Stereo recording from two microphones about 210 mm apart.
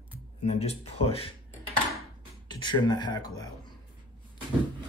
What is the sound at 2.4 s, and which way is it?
Speech, 20° left (ahead or behind).